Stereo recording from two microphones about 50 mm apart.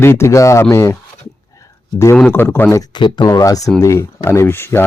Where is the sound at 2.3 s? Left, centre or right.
Left.